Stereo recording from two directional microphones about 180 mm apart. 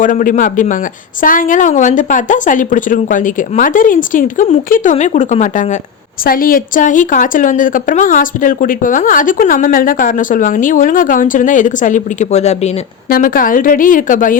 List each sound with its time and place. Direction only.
0.0 s a woman's voice: 45° left (ahead or behind)
6.2 s a woman's voice: 50° left (ahead or behind)
13.1 s a woman's voice: 50° left (ahead or behind)